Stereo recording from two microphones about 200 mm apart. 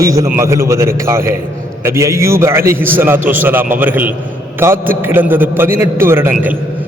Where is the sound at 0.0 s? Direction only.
15° right (ahead or behind).